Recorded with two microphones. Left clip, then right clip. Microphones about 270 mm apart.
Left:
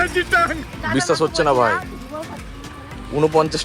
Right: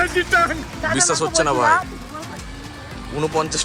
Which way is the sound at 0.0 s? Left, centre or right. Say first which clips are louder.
Even; centre.